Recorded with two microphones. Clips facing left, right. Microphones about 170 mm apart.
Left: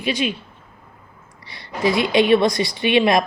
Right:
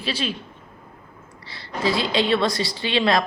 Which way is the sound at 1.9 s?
20° left (ahead or behind).